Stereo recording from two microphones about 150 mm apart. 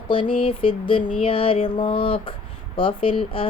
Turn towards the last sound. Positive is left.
turn(degrees=35)  # may be behind; listen again after turning